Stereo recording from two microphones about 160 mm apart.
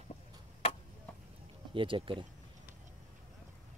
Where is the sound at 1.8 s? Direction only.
30° right (ahead or behind).